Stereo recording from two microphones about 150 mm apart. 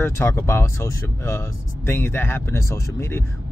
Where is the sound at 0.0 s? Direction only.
15° left (ahead or behind).